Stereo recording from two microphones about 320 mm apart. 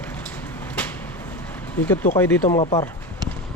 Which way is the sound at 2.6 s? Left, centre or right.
Centre.